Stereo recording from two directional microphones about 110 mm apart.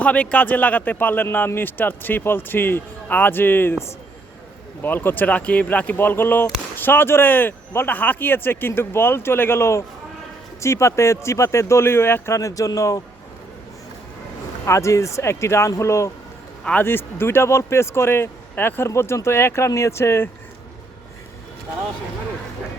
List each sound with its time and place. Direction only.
0.0 s a man's voice: 10° left (ahead or behind)
4.8 s speech: 20° left (ahead or behind)
14.6 s speech: 25° left (ahead or behind)